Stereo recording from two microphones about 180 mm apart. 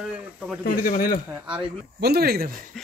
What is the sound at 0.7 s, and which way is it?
Speech, 55° left (ahead or behind).